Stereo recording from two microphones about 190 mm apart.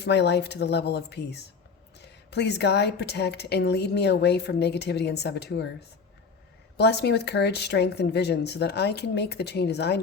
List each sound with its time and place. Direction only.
0.0 s speech: 60° left (ahead or behind)
6.7 s speech: 60° left (ahead or behind)